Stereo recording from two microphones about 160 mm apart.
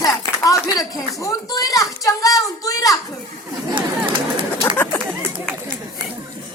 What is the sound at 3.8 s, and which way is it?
Bird, 30° right (ahead or behind).